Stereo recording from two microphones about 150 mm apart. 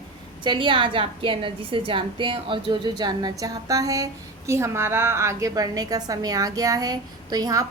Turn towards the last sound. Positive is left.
turn(degrees=-25)  # may be behind; listen again after turning